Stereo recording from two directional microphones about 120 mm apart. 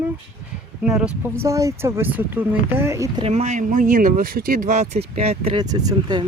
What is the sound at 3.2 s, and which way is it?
Speech, 65° right (ahead or behind).